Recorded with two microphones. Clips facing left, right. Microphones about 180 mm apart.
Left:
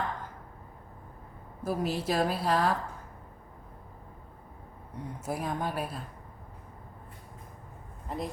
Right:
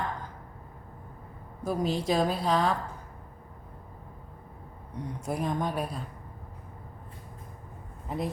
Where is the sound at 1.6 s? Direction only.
5° left (ahead or behind).